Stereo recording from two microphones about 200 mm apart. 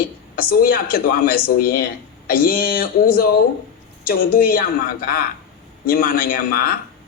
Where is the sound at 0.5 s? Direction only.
45° left (ahead or behind).